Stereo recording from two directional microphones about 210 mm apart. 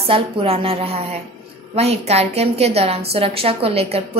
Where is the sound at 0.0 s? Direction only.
25° right (ahead or behind).